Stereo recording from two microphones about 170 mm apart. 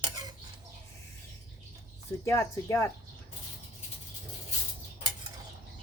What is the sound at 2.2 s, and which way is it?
Speech, 15° left (ahead or behind).